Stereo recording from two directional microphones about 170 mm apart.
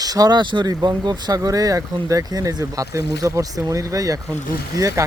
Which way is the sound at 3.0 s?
80° left.